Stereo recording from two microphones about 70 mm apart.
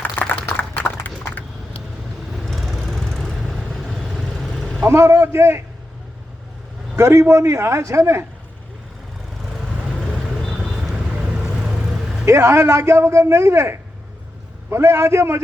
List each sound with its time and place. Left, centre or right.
0.4 s a sound: left
0.8 s clip-clop: left
2.3 s vehicle: centre
4.9 s a man's voice: right
6.9 s speech: right
9.5 s vehicle: centre
12.2 s a man's voice: right